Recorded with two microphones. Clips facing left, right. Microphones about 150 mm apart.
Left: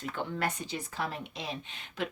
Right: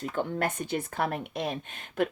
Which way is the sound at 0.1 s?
45° right (ahead or behind).